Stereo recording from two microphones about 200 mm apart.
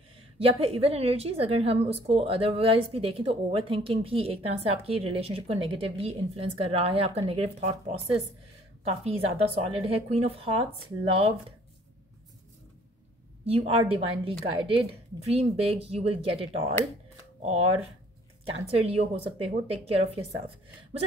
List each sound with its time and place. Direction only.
0.4 s a woman's voice: 30° right (ahead or behind)
9.0 s a woman's voice: 30° right (ahead or behind)
13.4 s a woman's voice: 30° right (ahead or behind)